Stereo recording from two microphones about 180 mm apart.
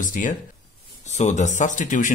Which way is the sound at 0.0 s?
50° left (ahead or behind).